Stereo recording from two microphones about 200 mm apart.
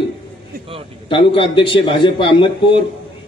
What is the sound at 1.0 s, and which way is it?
A man's voice, 25° left (ahead or behind).